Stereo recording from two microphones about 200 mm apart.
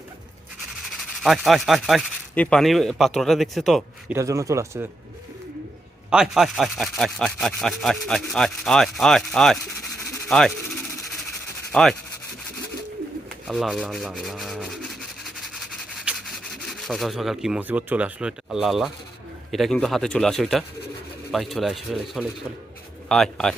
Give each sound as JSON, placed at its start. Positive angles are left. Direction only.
{"t": 0.9, "sound": "speech", "side_deg": 0}
{"t": 4.1, "sound": "speech", "side_deg": -15}
{"t": 6.1, "sound": "speech", "side_deg": -5}
{"t": 10.1, "sound": "a sound", "side_deg": 5}
{"t": 11.7, "sound": "speech", "side_deg": 0}
{"t": 13.5, "sound": "rub", "side_deg": 0}
{"t": 19.5, "sound": "speech", "side_deg": 0}